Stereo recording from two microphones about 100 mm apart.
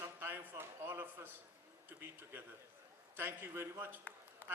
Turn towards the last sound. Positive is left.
turn(degrees=20)  # may be behind; listen again after turning